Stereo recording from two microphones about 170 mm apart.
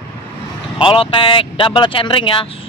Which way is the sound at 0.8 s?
30° left (ahead or behind).